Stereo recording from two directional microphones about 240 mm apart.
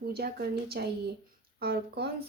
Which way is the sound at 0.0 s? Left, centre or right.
Right.